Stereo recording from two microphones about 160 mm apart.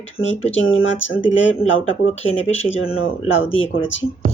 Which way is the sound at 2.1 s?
40° left (ahead or behind).